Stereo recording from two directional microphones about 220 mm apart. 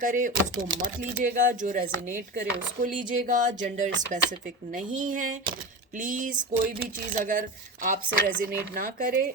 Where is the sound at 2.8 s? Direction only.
35° right (ahead or behind).